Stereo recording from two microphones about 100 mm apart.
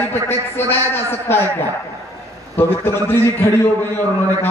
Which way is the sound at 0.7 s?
25° left (ahead or behind).